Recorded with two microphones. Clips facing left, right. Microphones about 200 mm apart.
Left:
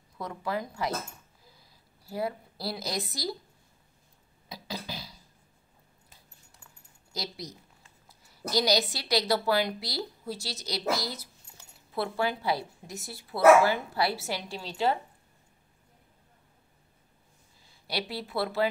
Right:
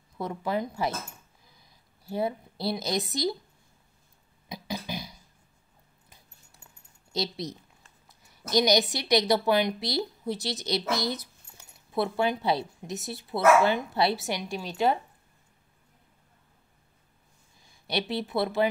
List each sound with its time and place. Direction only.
0.2 s a woman's voice: 25° right (ahead or behind)
4.5 s beatboxing: 20° right (ahead or behind)
7.1 s a woman's voice: 25° right (ahead or behind)
17.6 s speech: 20° right (ahead or behind)